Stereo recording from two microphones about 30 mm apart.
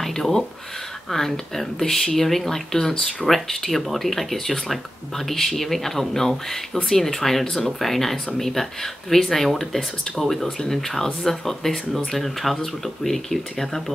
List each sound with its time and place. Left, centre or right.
0.0 s speech: centre
10.6 s speech: centre